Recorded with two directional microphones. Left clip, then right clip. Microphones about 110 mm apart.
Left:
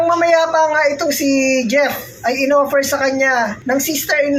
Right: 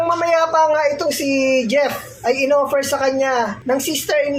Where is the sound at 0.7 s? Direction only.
35° right (ahead or behind).